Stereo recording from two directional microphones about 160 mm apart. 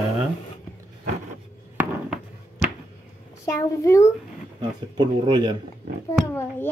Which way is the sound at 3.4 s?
20° left (ahead or behind).